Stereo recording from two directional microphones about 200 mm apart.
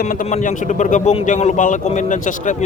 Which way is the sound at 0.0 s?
45° left (ahead or behind).